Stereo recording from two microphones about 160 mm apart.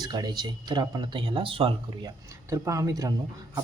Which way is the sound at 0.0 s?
25° right (ahead or behind).